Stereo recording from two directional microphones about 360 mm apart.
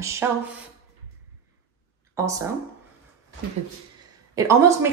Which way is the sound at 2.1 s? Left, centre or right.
Centre.